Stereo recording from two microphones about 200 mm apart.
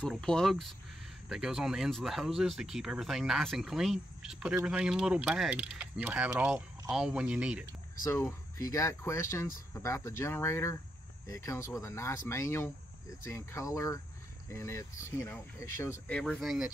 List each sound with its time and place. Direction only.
0.0 s speech: 5° left (ahead or behind)
8.0 s speech: 15° left (ahead or behind)